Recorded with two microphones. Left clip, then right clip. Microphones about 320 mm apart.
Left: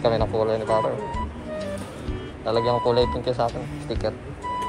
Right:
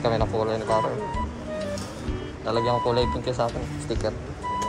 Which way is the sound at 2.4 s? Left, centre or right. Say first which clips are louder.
Left 2 dB; centre.